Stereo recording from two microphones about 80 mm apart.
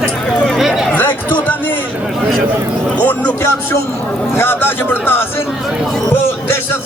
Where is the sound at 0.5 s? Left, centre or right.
Centre.